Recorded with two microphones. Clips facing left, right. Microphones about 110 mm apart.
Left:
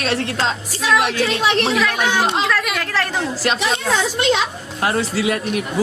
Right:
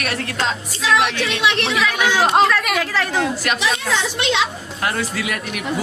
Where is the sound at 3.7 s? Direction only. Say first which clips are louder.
Left 2 dB; 35° left (ahead or behind).